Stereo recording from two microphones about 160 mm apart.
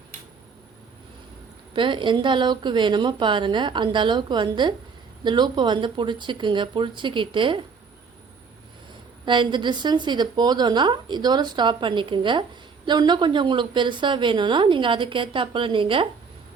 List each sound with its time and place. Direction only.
1.7 s a woman's voice: 30° right (ahead or behind)
9.2 s a woman's voice: 30° right (ahead or behind)